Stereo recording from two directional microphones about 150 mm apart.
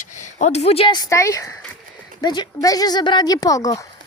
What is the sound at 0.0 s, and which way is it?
Speech, 55° left (ahead or behind).